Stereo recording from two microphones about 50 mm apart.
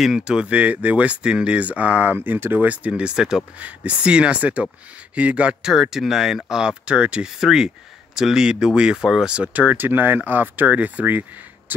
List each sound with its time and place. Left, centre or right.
0.2 s speech: centre; by 2.7 s right
2.7 s speech: right
3.5 s speech: right
5.6 s speech: centre
6.9 s speech: right